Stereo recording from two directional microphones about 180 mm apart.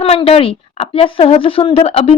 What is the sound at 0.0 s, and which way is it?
A woman's voice, 30° left (ahead or behind).